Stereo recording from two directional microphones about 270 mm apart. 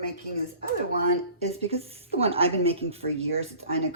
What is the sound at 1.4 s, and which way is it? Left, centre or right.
A woman's voice, right.